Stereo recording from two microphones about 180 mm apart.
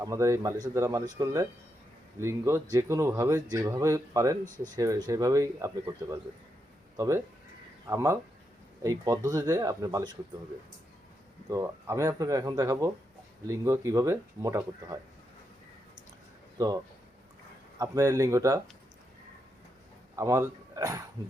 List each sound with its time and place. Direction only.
0.0 s speech: 15° right (ahead or behind)
4.4 s speech: 45° right (ahead or behind)
4.7 s speech: 20° right (ahead or behind)
11.4 s speech: 15° right (ahead or behind)
17.7 s speech: 20° right (ahead or behind)
20.1 s speech: 15° right (ahead or behind)